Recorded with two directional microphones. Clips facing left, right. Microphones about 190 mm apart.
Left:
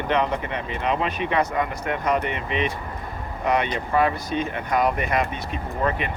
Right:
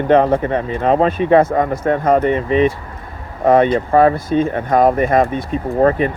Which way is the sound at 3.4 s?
50° right (ahead or behind).